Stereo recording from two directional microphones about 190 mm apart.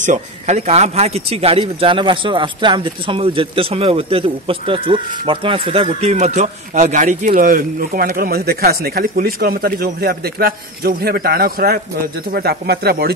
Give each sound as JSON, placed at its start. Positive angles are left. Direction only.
{"t": 0.0, "sound": "a man's voice", "side_deg": -40}